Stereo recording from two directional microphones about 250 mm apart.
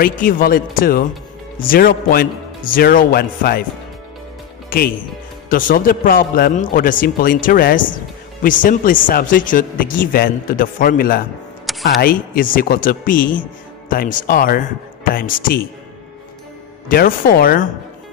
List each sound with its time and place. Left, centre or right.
0.2 s a man's voice: left
4.6 s a man's voice: left
11.7 s a sound: centre
12.0 s a man's voice: left
16.9 s a man's voice: left